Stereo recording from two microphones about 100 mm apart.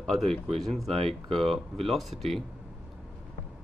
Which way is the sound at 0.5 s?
Centre (ahead or behind).